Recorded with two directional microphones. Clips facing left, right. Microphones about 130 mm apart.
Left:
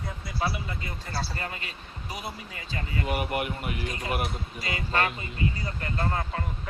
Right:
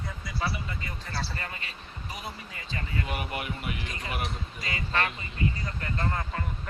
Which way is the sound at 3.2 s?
50° left (ahead or behind).